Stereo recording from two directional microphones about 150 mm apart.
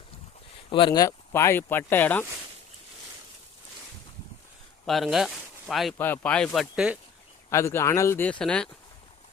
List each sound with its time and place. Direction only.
0.7 s speech: 35° left (ahead or behind); by 2.2 s 15° left (ahead or behind)
4.9 s speech: centre (ahead or behind)
6.0 s speech: 10° left (ahead or behind)
7.5 s speech: 20° left (ahead or behind)